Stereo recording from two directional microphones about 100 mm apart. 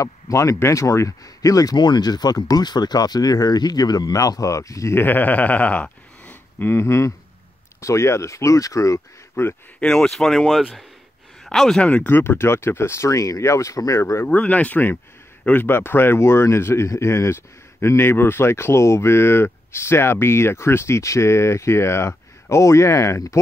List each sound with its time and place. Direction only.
0.0 s speech: 30° left (ahead or behind)
9.3 s a man's voice: 20° left (ahead or behind)
9.8 s speech: 5° left (ahead or behind)
11.9 s speech: 20° left (ahead or behind)
14.3 s speech: 15° left (ahead or behind)